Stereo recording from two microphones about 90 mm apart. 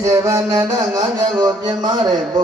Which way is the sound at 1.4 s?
50° right (ahead or behind).